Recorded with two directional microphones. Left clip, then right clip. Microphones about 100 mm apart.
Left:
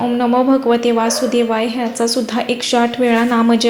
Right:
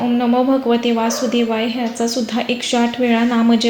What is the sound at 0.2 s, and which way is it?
A woman's voice, 35° left (ahead or behind).